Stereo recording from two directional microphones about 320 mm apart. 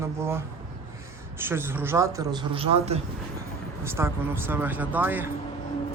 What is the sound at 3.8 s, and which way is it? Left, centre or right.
Speech, centre.